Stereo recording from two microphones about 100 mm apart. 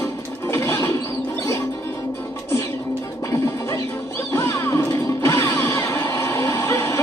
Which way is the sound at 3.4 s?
30° left (ahead or behind).